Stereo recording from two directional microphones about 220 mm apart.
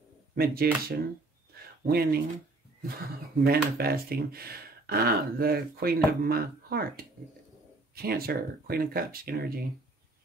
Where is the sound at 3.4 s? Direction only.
45° right (ahead or behind).